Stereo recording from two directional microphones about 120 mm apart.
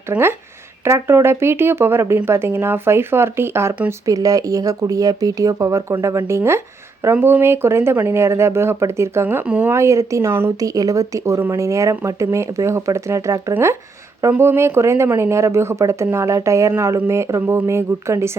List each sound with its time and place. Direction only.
0.1 s speech: 20° right (ahead or behind)